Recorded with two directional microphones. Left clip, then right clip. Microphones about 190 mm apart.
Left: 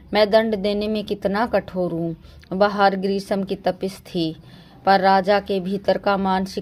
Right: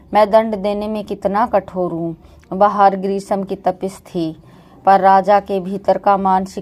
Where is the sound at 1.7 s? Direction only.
25° left (ahead or behind).